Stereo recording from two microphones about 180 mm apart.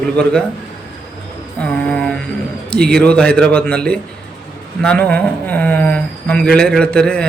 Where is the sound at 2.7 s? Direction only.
5° left (ahead or behind).